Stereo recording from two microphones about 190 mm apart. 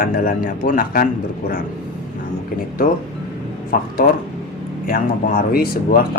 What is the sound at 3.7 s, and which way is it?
Speech, 50° left (ahead or behind).